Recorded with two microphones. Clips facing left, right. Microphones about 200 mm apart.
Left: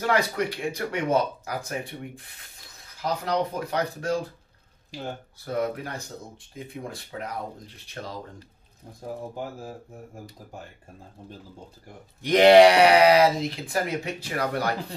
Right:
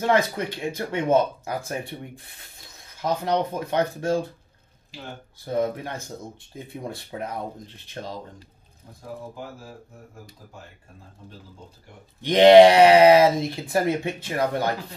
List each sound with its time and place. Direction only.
0.0 s speech: 25° right (ahead or behind)
5.4 s speech: 25° right (ahead or behind)
12.3 s speech: 20° right (ahead or behind)